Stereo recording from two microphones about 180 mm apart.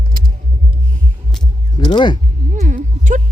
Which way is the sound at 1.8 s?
25° left (ahead or behind).